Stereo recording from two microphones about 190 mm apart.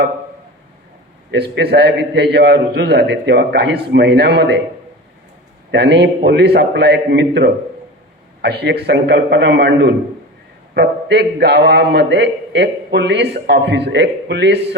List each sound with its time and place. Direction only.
1.3 s a man's voice: 60° right (ahead or behind)
5.7 s a man's voice: 60° right (ahead or behind)